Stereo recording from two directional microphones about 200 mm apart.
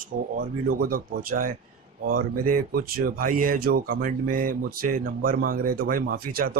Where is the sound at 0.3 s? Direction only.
45° right (ahead or behind).